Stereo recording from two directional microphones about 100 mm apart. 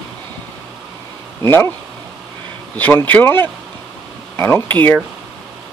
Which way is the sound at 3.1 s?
20° left (ahead or behind).